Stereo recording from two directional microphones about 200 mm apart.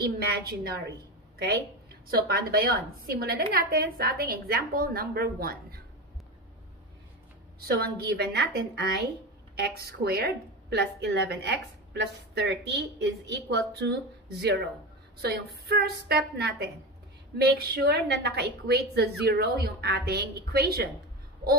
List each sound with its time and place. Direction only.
0.0 s a woman's voice: 55° right (ahead or behind)
7.6 s a woman's voice: 50° right (ahead or behind)
15.2 s a woman's voice: 50° right (ahead or behind)